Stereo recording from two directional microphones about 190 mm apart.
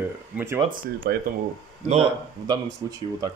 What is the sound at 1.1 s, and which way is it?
Speech, 55° right (ahead or behind).